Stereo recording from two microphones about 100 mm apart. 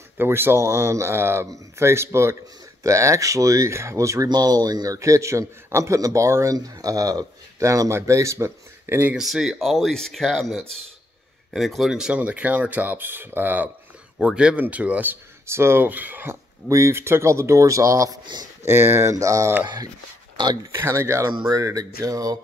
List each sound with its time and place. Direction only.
0.2 s speech: 25° right (ahead or behind)
9.1 s speech: 5° right (ahead or behind)
14.1 s speech: 10° right (ahead or behind)
16.6 s speech: 30° right (ahead or behind)
18.2 s speech: 45° right (ahead or behind)
18.6 s speech: 25° right (ahead or behind)
19.6 s speech: 45° right (ahead or behind)
20.7 s speech: 25° right (ahead or behind)